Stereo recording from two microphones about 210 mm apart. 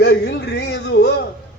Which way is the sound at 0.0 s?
55° left (ahead or behind).